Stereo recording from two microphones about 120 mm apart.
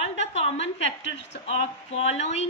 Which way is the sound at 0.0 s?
60° left (ahead or behind).